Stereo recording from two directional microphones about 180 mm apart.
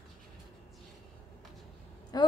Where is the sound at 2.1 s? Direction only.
20° left (ahead or behind).